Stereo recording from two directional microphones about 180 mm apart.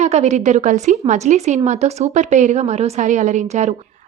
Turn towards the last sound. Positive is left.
turn(degrees=-40)  # may be behind; listen again after turning